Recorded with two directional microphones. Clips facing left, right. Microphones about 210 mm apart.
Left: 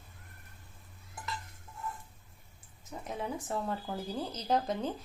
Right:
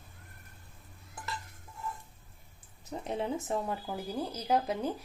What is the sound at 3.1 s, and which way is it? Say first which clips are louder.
Speech: right 4 dB; 25° right (ahead or behind).